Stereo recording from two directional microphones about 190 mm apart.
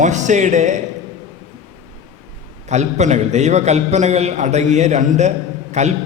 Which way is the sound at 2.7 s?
35° right (ahead or behind).